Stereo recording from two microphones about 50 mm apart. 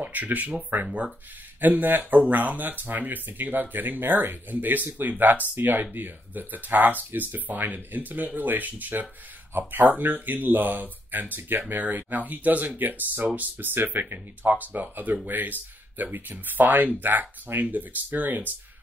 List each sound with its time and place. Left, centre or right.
0.0 s speech: right